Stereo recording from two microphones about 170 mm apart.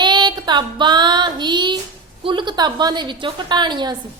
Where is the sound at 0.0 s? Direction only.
25° right (ahead or behind).